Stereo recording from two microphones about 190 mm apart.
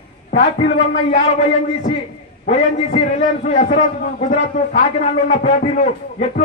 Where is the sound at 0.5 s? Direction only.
35° left (ahead or behind).